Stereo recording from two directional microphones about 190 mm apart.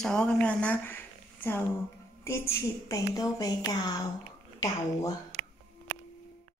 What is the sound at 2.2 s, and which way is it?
A woman's voice, 15° left (ahead or behind).